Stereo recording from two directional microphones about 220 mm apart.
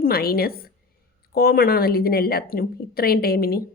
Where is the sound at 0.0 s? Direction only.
45° left (ahead or behind).